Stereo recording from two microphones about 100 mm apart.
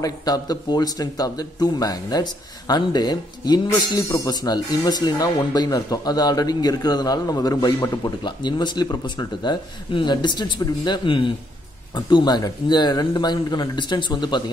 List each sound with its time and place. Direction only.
0.0 s a man's voice: 40° left (ahead or behind)